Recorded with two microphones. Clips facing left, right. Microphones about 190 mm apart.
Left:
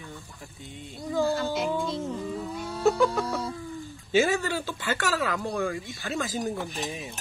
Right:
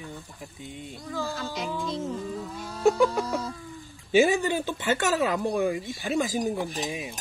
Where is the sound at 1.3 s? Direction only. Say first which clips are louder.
Left 5 dB; centre (ahead or behind).